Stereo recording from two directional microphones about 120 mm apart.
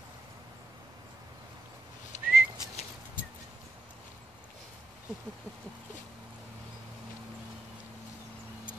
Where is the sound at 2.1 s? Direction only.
80° left.